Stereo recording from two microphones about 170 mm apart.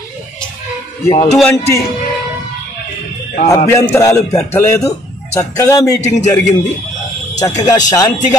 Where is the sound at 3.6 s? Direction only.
15° left (ahead or behind).